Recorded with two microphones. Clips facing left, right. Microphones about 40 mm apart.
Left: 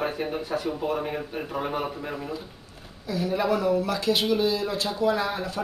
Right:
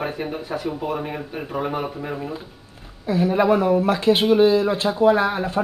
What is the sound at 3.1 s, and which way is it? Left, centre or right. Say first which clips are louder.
Speech: right 7 dB; right.